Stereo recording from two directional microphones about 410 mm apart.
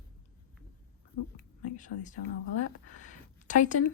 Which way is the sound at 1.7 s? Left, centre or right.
Centre.